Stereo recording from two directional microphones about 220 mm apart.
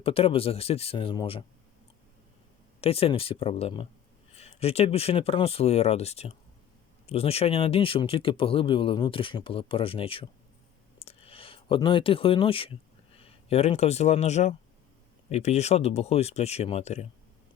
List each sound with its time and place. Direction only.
0.0 s speech: 25° left (ahead or behind)
2.8 s speech: 25° left (ahead or behind)
11.0 s a sound: 25° left (ahead or behind)
13.1 s speech: 30° left (ahead or behind)